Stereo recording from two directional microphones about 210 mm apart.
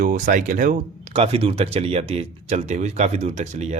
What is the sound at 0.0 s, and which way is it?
Speech, 40° right (ahead or behind).